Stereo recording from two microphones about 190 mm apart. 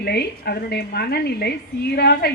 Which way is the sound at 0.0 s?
55° left (ahead or behind).